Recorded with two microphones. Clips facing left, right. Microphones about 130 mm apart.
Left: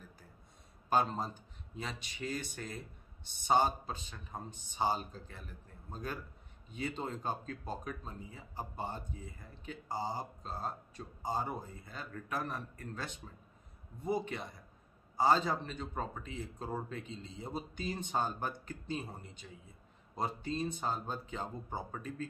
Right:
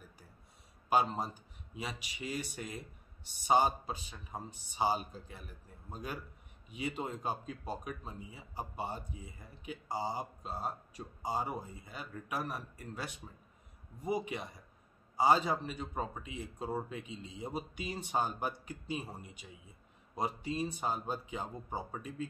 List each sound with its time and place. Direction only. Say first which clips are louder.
0.8 s a man's voice: right 1 dB; 10° right (ahead or behind)